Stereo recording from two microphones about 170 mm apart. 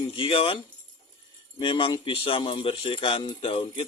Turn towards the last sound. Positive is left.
turn(degrees=35)  # may be behind; listen again after turning